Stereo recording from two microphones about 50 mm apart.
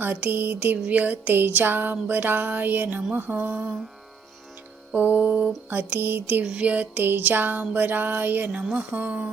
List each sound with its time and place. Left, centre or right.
0.0 s music: right
4.9 s music: right
5.7 s music: right
6.4 s music: right
7.0 s music: right
8.9 s music: right